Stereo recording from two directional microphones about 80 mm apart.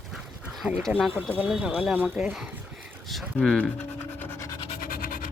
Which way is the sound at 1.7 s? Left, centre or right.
Centre.